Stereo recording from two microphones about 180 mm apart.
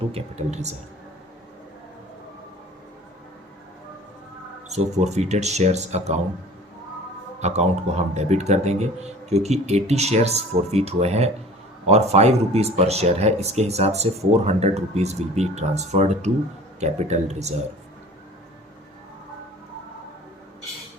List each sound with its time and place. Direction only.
0.1 s speech: 35° right (ahead or behind)
4.7 s speech: 40° right (ahead or behind)
7.4 s speech: 40° right (ahead or behind)